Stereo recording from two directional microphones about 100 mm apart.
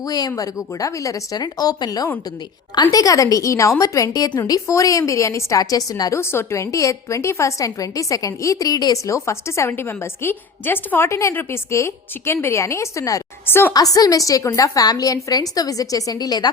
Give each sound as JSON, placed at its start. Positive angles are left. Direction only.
{"t": 0.1, "sound": "a woman's voice", "side_deg": 35}